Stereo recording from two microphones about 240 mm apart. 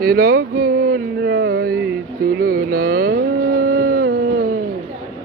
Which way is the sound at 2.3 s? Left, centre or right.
Right.